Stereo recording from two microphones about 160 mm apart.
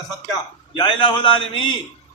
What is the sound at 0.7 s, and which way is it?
A man's voice, 30° left (ahead or behind).